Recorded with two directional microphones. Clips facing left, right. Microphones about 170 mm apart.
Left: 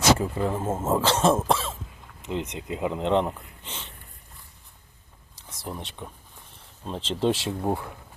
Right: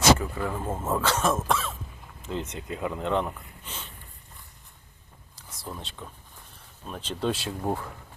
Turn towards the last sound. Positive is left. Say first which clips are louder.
# left 3 dB
turn(degrees=10)  # may be behind; listen again after turning